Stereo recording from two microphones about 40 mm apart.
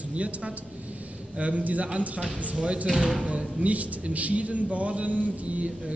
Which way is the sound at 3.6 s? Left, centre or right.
Right.